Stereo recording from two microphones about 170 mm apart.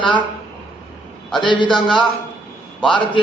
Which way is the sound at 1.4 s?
25° left (ahead or behind).